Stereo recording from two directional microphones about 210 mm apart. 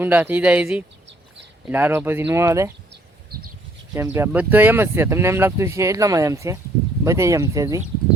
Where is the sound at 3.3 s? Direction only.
45° right (ahead or behind).